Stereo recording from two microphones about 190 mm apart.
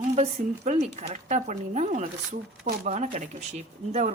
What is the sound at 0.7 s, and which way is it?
Speech, 35° right (ahead or behind).